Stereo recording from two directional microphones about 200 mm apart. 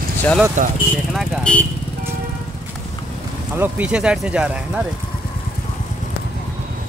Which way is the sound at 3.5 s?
10° right (ahead or behind).